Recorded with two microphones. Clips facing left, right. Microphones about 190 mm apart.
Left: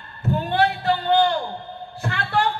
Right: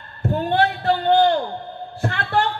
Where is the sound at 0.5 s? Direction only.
50° right (ahead or behind).